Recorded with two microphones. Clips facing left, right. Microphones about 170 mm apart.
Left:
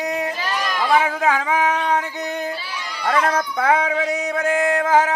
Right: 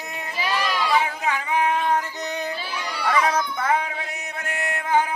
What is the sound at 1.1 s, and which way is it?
Music, 90° left.